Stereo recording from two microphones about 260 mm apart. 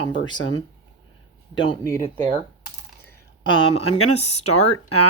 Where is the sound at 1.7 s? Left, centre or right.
Centre.